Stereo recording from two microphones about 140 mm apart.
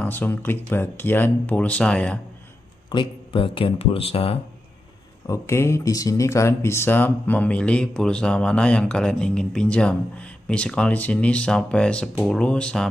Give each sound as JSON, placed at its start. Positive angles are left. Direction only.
{"t": 0.0, "sound": "speech", "side_deg": 15}
{"t": 2.9, "sound": "speech", "side_deg": 35}
{"t": 5.2, "sound": "speech", "side_deg": 20}